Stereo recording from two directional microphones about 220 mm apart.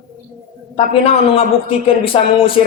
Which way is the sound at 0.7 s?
25° left (ahead or behind).